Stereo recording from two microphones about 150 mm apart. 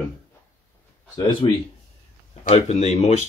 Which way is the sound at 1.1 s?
25° left (ahead or behind).